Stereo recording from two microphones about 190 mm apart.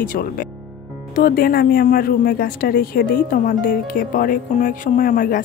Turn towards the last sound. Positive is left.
turn(degrees=45)  # may be behind; listen again after turning